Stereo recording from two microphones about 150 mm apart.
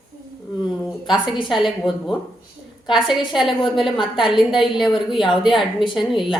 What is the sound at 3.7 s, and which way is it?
Speech, centre (ahead or behind).